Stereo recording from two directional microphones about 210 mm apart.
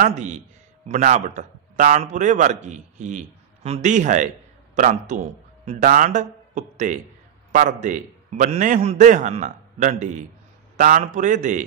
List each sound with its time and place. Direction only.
0.0 s a man's voice: 35° right (ahead or behind)